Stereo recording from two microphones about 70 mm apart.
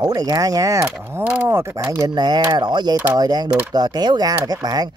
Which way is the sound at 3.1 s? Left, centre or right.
Right.